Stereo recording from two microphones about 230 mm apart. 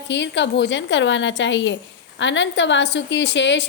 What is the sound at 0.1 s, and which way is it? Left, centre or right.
A woman's voice, left.